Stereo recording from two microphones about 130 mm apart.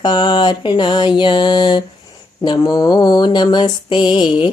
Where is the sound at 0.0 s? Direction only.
35° left (ahead or behind).